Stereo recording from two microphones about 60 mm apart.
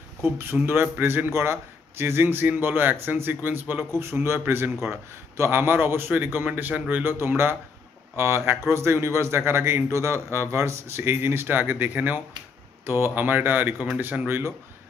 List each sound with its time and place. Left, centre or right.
0.2 s a man's voice: right
4.0 s a man's voice: right
8.5 s a man's voice: right